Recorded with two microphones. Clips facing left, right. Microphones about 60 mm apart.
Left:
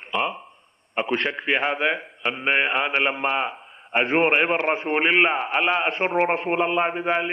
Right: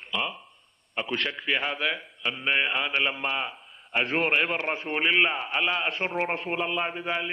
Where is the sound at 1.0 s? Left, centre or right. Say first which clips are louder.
Left 6 dB; left.